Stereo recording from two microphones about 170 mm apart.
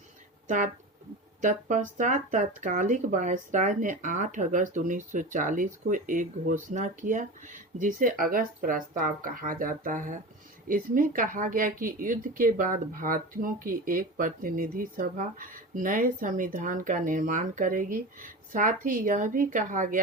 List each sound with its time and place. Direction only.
0.4 s speech: 45° right (ahead or behind)